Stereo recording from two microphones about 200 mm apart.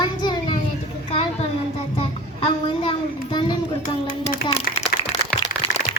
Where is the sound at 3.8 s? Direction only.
40° left (ahead or behind).